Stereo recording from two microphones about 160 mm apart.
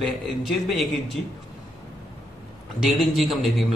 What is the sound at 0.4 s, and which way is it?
Speech, centre (ahead or behind).